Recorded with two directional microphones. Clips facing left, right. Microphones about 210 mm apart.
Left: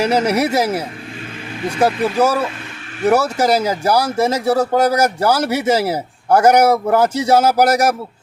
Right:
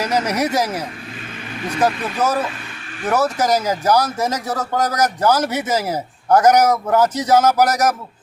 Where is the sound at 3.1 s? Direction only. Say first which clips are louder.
Left 3 dB; 10° left (ahead or behind).